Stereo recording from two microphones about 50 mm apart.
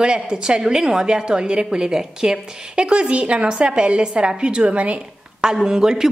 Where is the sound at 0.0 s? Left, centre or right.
Centre.